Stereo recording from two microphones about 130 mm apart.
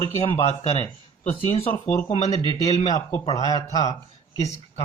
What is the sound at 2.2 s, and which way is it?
Speech, 55° left (ahead or behind).